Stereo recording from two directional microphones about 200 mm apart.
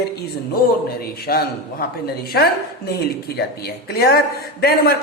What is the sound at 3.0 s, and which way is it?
A woman's voice, 55° left (ahead or behind).